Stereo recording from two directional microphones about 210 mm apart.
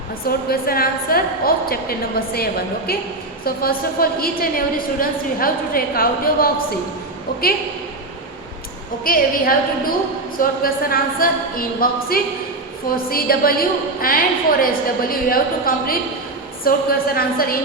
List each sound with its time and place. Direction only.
0.3 s a woman's voice: 45° left (ahead or behind)
9.0 s a woman's voice: 45° left (ahead or behind)